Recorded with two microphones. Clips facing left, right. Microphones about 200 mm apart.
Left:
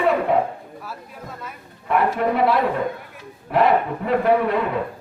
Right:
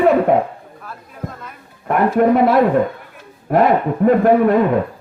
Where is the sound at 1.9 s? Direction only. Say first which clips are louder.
Right 6 dB; 45° right (ahead or behind).